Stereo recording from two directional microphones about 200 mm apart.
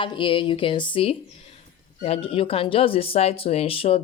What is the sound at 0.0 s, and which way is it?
Speech, 25° left (ahead or behind).